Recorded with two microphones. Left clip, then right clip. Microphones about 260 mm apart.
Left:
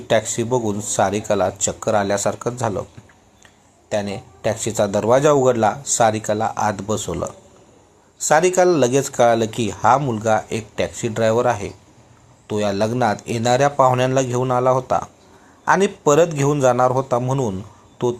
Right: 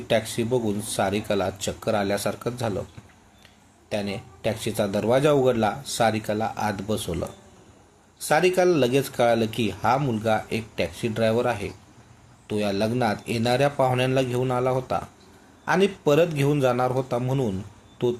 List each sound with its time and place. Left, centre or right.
0.1 s speech: centre
3.8 s speech: centre